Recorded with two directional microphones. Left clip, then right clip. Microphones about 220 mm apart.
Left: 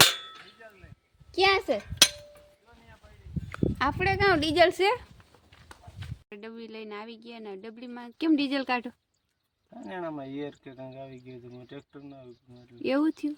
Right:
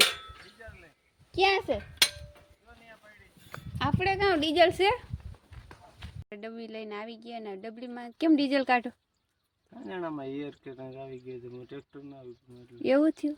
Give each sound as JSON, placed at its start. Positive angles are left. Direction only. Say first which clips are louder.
{"t": 1.3, "sound": "speech", "louder": "left 2 dB", "side_deg": 10}
{"t": 3.5, "sound": "speech", "louder": "left 4 dB", "side_deg": 10}
{"t": 9.8, "sound": "speech", "louder": "even", "side_deg": 20}
{"t": 12.8, "sound": "speech", "louder": "right 2 dB", "side_deg": -5}